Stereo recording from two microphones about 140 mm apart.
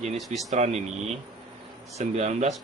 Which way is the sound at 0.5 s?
55° right (ahead or behind).